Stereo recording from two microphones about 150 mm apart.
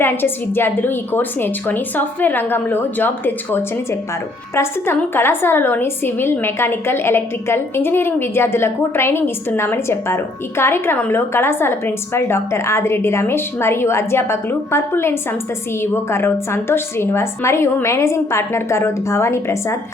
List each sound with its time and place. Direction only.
0.0 s a woman's voice: 15° left (ahead or behind)